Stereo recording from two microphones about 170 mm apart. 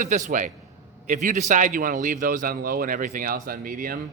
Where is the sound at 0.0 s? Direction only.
45° right (ahead or behind).